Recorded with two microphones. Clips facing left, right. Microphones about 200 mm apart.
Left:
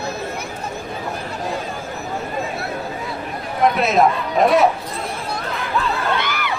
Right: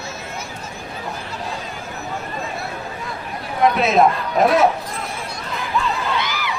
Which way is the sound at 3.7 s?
Centre (ahead or behind).